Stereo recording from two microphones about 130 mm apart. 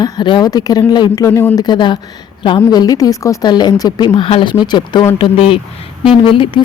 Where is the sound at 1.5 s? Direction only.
35° left (ahead or behind).